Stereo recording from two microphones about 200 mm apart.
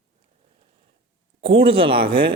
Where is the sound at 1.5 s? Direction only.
30° right (ahead or behind).